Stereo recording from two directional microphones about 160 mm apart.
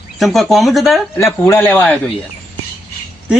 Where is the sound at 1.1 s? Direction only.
15° left (ahead or behind).